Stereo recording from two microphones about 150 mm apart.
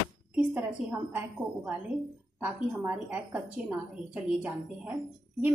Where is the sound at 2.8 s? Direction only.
10° right (ahead or behind).